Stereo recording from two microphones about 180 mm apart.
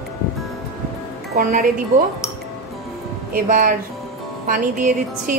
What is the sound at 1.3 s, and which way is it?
Speech, 50° right (ahead or behind).